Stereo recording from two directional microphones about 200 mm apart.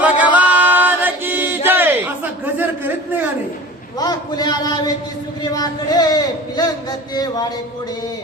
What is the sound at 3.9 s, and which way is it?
Speech, 20° left (ahead or behind).